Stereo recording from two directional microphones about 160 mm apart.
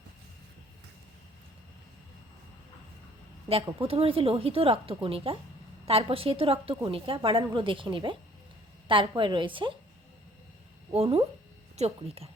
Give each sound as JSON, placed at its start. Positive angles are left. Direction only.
{"t": 3.5, "sound": "speech", "side_deg": -35}
{"t": 10.9, "sound": "speech", "side_deg": -40}